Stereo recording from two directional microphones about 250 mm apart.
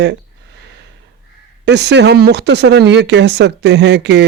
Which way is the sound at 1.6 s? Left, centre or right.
Right.